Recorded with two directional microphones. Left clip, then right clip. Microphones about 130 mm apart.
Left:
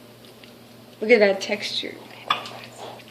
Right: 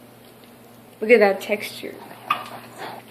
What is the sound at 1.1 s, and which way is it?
Speech, 60° left (ahead or behind).